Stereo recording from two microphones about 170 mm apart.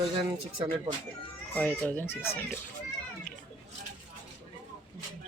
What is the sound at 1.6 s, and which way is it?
Speech, 5° left (ahead or behind).